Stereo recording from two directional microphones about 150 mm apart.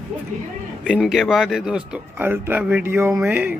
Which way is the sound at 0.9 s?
Centre (ahead or behind).